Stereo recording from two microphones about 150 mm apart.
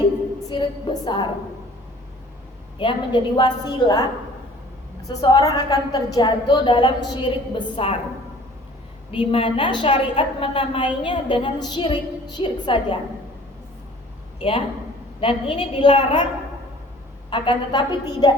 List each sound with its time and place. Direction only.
0.5 s a woman's voice: 30° left (ahead or behind)
2.7 s a woman's voice: 35° left (ahead or behind)
5.0 s a woman's voice: 25° left (ahead or behind)
9.1 s a woman's voice: 35° left (ahead or behind)
14.3 s a man's voice: 40° left (ahead or behind)
17.2 s a woman's voice: 35° left (ahead or behind)